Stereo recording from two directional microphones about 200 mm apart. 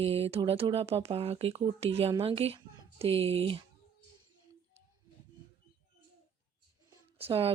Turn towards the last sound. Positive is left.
turn(degrees=-30)  # may be behind; listen again after turning